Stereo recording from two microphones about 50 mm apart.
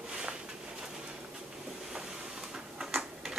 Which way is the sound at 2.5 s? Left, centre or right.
Centre.